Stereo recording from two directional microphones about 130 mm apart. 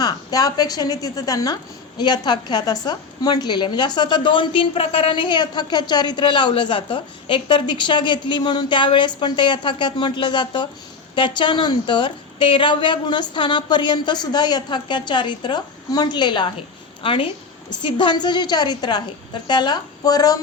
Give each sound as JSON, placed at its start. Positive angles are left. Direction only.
{"t": 0.0, "sound": "a woman's voice", "side_deg": 30}